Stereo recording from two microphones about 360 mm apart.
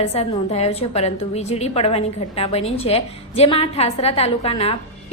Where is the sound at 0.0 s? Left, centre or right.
Centre.